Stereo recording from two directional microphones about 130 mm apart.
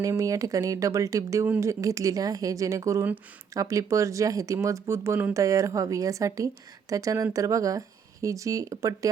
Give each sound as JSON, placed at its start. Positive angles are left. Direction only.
{"t": 0.0, "sound": "speech", "side_deg": -25}